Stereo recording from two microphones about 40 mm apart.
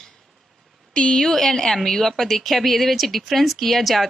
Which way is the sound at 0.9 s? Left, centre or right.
Left.